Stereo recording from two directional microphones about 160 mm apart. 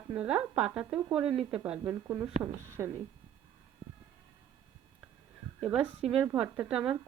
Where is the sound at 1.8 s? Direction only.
20° right (ahead or behind).